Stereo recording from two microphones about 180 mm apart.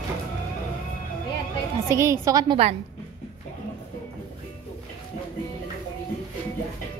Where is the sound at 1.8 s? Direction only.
15° right (ahead or behind).